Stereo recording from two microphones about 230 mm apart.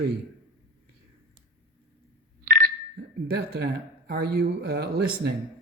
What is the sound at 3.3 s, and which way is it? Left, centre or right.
Speech, right.